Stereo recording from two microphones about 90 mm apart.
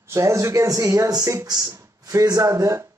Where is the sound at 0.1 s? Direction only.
35° right (ahead or behind).